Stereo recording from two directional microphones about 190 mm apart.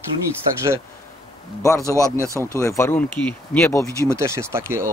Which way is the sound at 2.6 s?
15° left (ahead or behind).